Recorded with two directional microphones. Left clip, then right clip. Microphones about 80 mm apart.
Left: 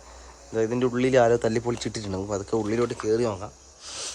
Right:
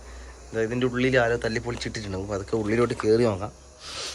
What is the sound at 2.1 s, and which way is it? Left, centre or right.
Speech, left.